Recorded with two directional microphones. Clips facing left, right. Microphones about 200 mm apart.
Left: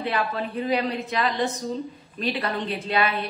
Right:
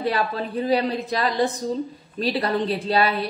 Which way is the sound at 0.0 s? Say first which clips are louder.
Right 2 dB; 35° right (ahead or behind).